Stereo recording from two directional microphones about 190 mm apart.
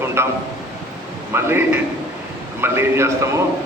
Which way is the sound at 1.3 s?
10° right (ahead or behind).